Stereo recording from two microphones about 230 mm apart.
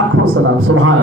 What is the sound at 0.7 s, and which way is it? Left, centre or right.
Speech, right.